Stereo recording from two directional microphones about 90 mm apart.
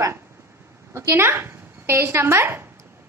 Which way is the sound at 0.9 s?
30° right (ahead or behind).